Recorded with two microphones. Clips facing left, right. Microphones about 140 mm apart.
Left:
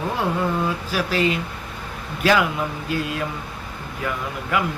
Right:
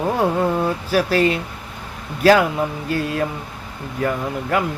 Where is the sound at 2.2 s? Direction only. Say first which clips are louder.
Right 5 dB; 40° right (ahead or behind).